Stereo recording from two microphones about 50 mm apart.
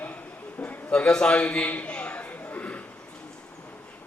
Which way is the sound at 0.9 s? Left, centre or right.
Centre.